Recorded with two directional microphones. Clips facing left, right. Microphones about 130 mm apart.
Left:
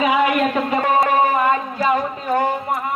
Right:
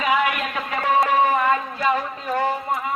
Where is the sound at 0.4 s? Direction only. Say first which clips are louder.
Left 7 dB; 35° left (ahead or behind).